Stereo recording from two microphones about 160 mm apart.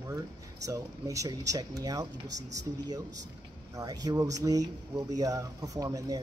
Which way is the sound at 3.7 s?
25° right (ahead or behind).